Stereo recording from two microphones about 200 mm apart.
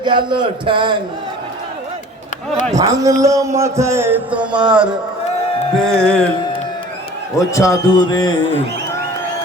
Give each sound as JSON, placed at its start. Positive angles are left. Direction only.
{"t": 0.0, "sound": "a man's voice", "side_deg": -25}
{"t": 2.7, "sound": "a man's voice", "side_deg": -15}
{"t": 6.0, "sound": "music", "side_deg": 5}
{"t": 7.3, "sound": "a man's voice", "side_deg": 15}